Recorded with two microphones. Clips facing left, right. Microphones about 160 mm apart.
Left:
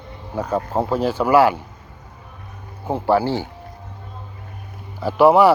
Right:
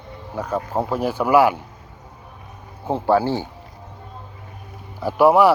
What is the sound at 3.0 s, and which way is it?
Speech, 20° right (ahead or behind).